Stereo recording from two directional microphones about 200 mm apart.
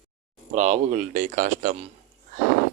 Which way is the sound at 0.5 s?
35° right (ahead or behind).